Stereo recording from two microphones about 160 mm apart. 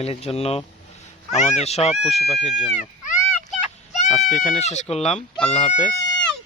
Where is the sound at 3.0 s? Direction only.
50° left (ahead or behind).